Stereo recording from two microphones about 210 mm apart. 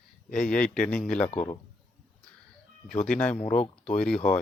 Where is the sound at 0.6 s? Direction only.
5° left (ahead or behind).